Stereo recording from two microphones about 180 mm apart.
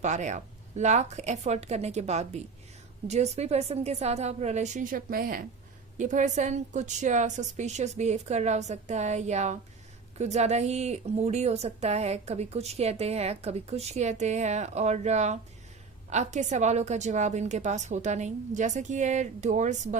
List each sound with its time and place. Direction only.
0.0 s a woman's voice: 40° right (ahead or behind)